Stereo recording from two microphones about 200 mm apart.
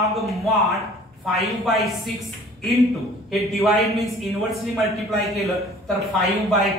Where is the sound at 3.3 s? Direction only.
Centre (ahead or behind).